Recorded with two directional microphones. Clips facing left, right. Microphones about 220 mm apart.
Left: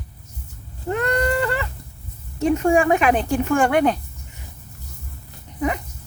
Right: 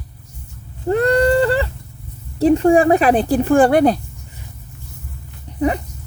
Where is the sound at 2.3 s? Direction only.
35° right (ahead or behind).